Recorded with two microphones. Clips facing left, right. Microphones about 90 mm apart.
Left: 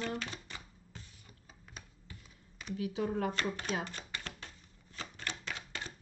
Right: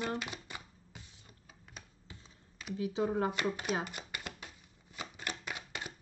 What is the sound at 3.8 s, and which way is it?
Shuffling cards, 15° right (ahead or behind).